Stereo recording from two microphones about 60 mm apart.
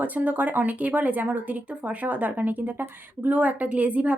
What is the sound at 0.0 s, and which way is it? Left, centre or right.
Speech, right.